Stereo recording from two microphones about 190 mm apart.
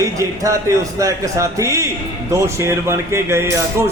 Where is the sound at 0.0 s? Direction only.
15° right (ahead or behind).